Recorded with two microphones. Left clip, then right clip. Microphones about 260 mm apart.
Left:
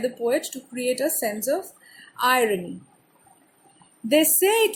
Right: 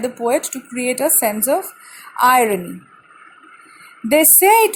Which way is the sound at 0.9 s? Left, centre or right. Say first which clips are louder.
Right 7 dB; right.